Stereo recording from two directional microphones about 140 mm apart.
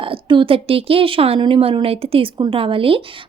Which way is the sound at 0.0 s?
40° right (ahead or behind).